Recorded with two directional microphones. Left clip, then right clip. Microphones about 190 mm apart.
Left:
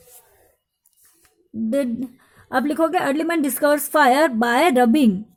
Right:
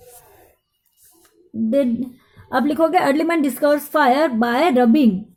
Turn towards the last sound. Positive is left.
turn(degrees=30)  # may be behind; listen again after turning